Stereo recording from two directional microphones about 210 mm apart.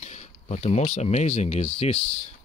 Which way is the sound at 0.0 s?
35° left (ahead or behind).